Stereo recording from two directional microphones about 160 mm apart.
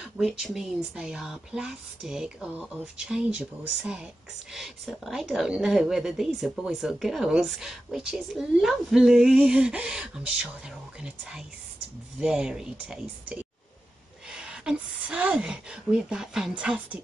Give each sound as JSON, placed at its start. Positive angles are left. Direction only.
{"t": 0.0, "sound": "a woman's voice", "side_deg": 0}